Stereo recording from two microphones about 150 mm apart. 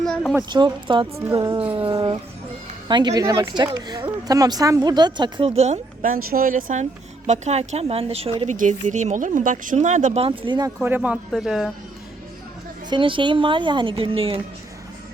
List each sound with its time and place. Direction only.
0.0 s a sound: 5° left (ahead or behind)
0.5 s a woman's voice: 30° right (ahead or behind)
1.7 s a sound: 35° right (ahead or behind)
2.8 s speech: 30° right (ahead or behind)
5.5 s speech: 50° right (ahead or behind)
6.1 s speech: 70° right (ahead or behind)
7.3 s a woman's voice: 50° right (ahead or behind)
8.4 s speech: 55° right (ahead or behind); by 10.7 s 30° right (ahead or behind)
10.8 s speech: 10° right (ahead or behind)
12.9 s a woman's voice: 35° right (ahead or behind)